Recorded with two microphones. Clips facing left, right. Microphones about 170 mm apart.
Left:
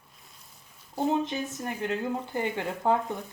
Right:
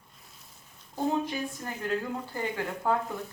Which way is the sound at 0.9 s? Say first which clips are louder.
Left 2 dB; 20° left (ahead or behind).